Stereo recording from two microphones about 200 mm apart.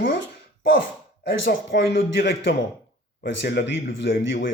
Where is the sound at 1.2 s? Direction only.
70° left (ahead or behind).